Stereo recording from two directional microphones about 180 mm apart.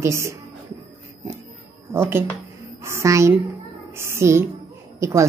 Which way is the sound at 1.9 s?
10° right (ahead or behind).